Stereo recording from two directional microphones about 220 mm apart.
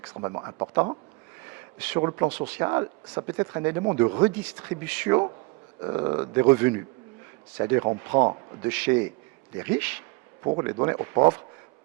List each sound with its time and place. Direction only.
0.1 s speech: 20° right (ahead or behind)
2.0 s speech: 20° right (ahead or behind)
8.7 s speech: 10° right (ahead or behind)